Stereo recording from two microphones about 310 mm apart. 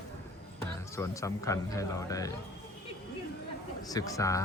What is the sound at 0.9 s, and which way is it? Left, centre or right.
A man's voice, centre.